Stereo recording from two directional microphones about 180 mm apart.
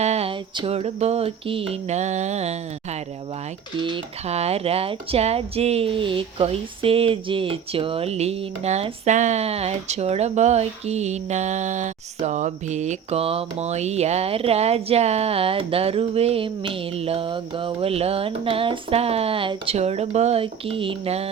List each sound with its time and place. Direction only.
0.0 s speech: 35° right (ahead or behind)